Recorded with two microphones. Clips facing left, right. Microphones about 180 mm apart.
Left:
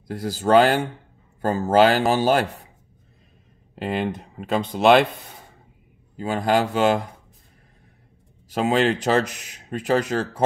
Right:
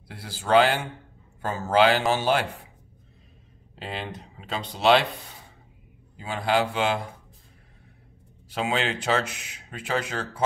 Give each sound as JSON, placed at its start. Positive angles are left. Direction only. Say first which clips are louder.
{"t": 0.1, "sound": "speech", "louder": "left 4 dB", "side_deg": 45}
{"t": 3.7, "sound": "speech", "louder": "left 9 dB", "side_deg": 50}
{"t": 6.1, "sound": "speech", "louder": "left 4 dB", "side_deg": 45}
{"t": 8.5, "sound": "speech", "louder": "left 7 dB", "side_deg": 40}